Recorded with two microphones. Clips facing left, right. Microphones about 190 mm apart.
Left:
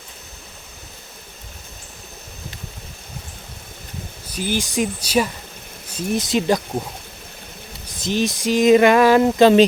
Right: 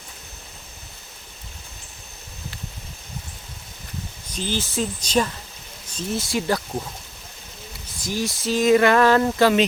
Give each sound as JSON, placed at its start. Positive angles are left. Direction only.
{"t": 4.3, "sound": "speech", "side_deg": 10}
{"t": 8.0, "sound": "speech", "side_deg": 20}